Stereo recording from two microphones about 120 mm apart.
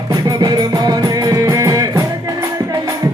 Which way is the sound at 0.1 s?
35° right (ahead or behind).